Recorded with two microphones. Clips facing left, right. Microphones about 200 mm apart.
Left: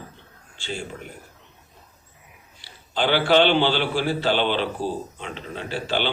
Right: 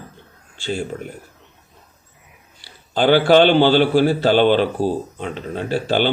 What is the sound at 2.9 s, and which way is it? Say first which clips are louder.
A man's voice: right 6 dB; 45° right (ahead or behind).